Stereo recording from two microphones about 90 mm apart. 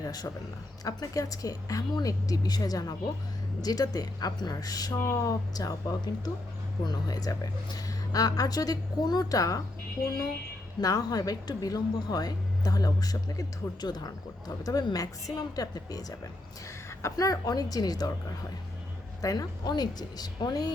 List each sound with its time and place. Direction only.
0.0 s a man's voice: 45° left (ahead or behind)
10.8 s speech: 40° left (ahead or behind)
19.2 s speech: 45° left (ahead or behind)